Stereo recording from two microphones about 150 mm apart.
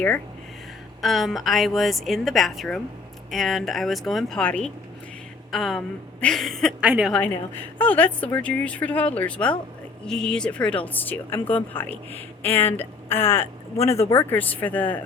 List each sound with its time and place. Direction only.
1.0 s a woman's voice: centre (ahead or behind)
6.8 s a woman's voice: 10° right (ahead or behind)
7.8 s speech: 10° left (ahead or behind)